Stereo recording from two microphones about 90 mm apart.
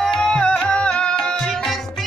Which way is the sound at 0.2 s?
10° left (ahead or behind).